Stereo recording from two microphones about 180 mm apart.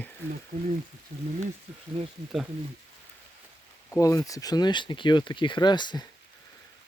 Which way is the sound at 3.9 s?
20° left (ahead or behind).